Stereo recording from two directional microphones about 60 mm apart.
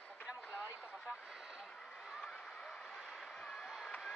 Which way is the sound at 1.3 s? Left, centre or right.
Centre.